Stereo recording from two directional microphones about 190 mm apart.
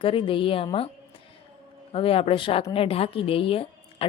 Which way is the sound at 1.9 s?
30° left (ahead or behind).